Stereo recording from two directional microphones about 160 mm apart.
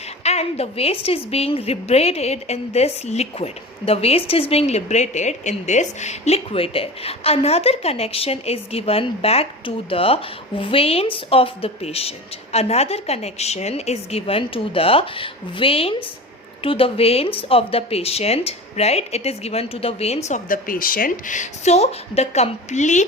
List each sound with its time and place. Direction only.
0.2 s a woman's voice: 40° left (ahead or behind)